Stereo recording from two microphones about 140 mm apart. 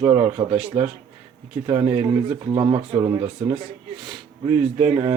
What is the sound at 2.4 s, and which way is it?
Speech, 30° right (ahead or behind).